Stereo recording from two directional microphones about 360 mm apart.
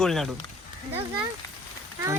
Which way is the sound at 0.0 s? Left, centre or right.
Centre.